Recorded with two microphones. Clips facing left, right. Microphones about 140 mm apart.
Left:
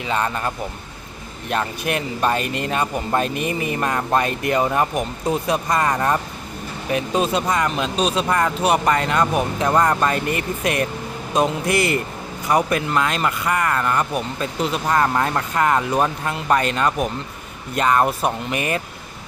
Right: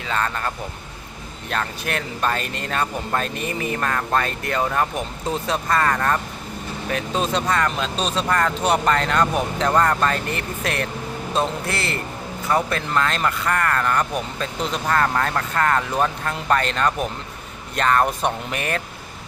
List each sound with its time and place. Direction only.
0.1 s speech: 15° left (ahead or behind)